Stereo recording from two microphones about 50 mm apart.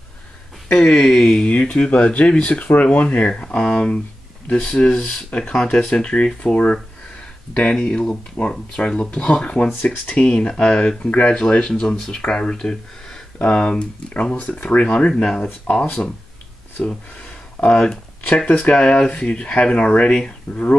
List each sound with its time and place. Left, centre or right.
0.7 s speech: centre
1.5 s speech: left
15.7 s speech: left
17.6 s speech: left
18.8 s speech: left